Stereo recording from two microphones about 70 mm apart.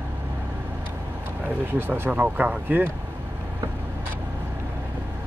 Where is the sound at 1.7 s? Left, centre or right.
Right.